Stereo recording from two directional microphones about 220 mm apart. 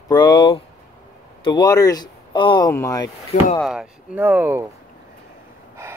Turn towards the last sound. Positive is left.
turn(degrees=-10)  # may be behind; listen again after turning